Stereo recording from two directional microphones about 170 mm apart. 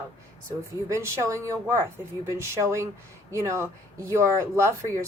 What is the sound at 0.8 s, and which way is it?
Speech, 15° right (ahead or behind).